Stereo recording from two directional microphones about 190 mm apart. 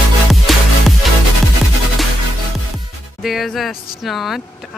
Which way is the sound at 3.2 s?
Centre (ahead or behind).